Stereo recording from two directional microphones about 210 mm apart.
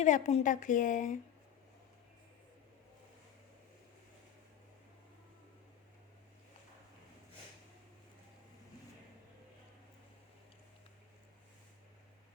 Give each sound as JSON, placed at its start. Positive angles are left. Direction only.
{"t": 0.0, "sound": "a woman's voice", "side_deg": 35}